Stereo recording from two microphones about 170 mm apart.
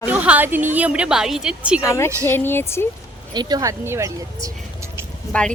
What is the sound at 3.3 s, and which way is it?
Speech, 20° right (ahead or behind).